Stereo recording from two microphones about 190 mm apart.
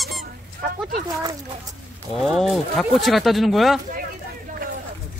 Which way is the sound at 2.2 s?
Centre (ahead or behind).